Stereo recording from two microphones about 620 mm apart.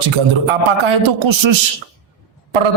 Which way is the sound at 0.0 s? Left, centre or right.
Right.